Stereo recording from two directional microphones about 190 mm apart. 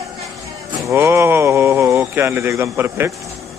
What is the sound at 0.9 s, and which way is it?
Speech, 15° right (ahead or behind).